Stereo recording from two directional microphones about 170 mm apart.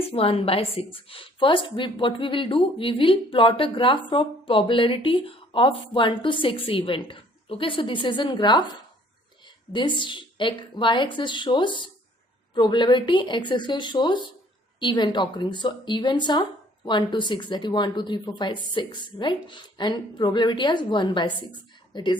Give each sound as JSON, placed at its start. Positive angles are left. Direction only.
{"t": 0.1, "sound": "a woman's voice", "side_deg": 35}
{"t": 9.7, "sound": "a woman's voice", "side_deg": 30}